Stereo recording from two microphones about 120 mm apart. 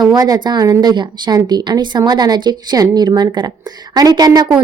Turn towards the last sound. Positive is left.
turn(degrees=-35)  # may be behind; listen again after turning